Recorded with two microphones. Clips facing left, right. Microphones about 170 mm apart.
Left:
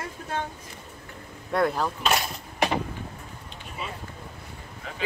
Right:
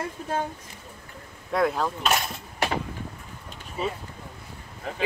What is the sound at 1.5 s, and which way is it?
Speech, centre (ahead or behind).